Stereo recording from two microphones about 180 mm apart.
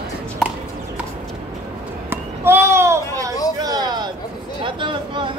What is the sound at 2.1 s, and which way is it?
Children playing, 10° right (ahead or behind).